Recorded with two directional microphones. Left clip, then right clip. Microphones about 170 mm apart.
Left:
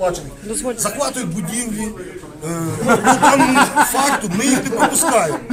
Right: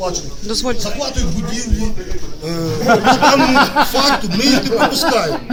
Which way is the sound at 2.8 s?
40° right (ahead or behind).